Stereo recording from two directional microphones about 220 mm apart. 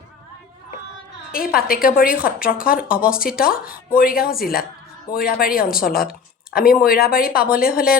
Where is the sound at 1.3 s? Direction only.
40° left (ahead or behind).